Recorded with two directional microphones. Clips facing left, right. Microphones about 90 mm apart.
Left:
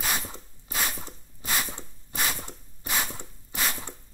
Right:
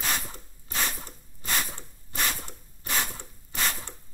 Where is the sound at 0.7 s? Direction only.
10° left (ahead or behind).